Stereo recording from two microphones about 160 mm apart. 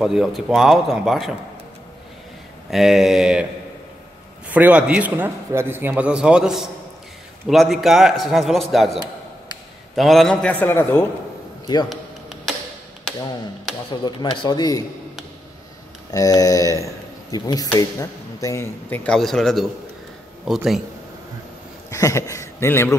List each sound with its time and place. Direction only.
0.0 s a man's voice: centre (ahead or behind)
2.7 s a man's voice: centre (ahead or behind)
4.5 s a man's voice: 10° right (ahead or behind); by 11.1 s 15° left (ahead or behind)
11.6 s speech: 25° left (ahead or behind)
14.0 s a man's voice: 30° left (ahead or behind)
16.1 s a man's voice: 20° left (ahead or behind); by 20.8 s centre (ahead or behind)
21.9 s speech: 20° left (ahead or behind)